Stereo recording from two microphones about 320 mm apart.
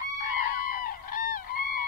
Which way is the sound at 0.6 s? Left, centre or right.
Left.